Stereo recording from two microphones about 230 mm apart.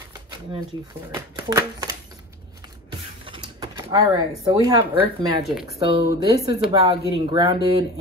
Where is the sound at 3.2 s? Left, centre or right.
Right.